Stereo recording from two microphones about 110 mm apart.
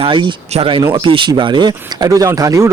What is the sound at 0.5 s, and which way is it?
Speech, 85° right.